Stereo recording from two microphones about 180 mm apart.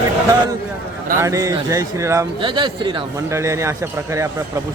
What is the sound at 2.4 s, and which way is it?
Speech, 25° right (ahead or behind).